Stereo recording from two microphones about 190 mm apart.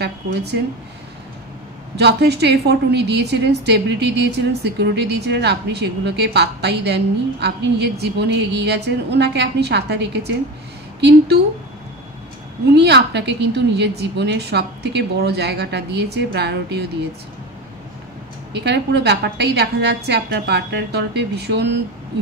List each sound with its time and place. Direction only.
0.0 s a sound: 60° right (ahead or behind)
2.0 s a woman's voice: 60° right (ahead or behind)
12.7 s a woman's voice: 60° right (ahead or behind)
18.5 s a woman's voice: 60° right (ahead or behind)